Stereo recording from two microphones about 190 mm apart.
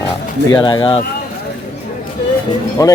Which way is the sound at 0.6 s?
25° left (ahead or behind).